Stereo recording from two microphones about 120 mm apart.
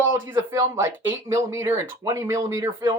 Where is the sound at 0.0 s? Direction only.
20° right (ahead or behind).